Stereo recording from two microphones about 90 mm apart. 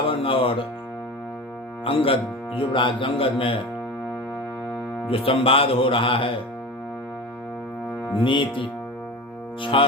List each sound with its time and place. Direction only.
0.0 s speech: 90° left
1.8 s music: 90° left
2.6 s music: 70° left (ahead or behind); by 3.6 s 85° left
5.0 s speech: 90° left
8.2 s speech: 65° left (ahead or behind)